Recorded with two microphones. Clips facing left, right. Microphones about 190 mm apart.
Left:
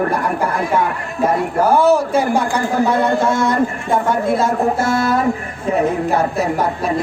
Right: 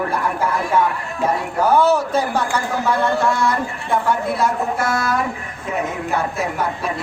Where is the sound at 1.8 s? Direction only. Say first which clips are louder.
Left 3 dB; 10° left (ahead or behind); by 6.6 s 40° left (ahead or behind).